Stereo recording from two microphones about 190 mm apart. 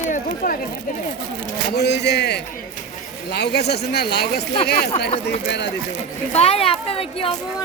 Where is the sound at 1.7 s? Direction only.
60° left (ahead or behind).